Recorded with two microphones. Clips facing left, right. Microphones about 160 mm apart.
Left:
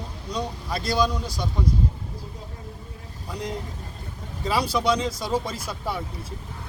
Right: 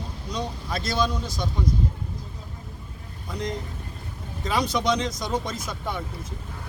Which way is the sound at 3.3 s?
10° left (ahead or behind).